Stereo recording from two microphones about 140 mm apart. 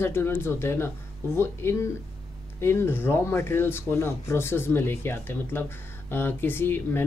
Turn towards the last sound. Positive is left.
turn(degrees=15)  # may be behind; listen again after turning